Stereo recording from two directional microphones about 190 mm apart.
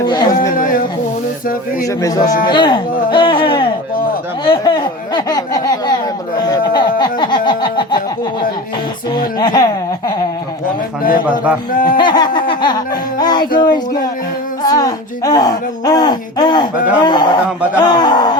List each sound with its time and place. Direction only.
0.0 s speech: 20° left (ahead or behind)
0.5 s a sound: 45° left (ahead or behind)
2.0 s speech: 20° left (ahead or behind)
6.5 s a sound: 25° left (ahead or behind)
9.1 s speech: 20° left (ahead or behind)
11.7 s speech: 45° left (ahead or behind)
12.0 s speech: 25° left (ahead or behind)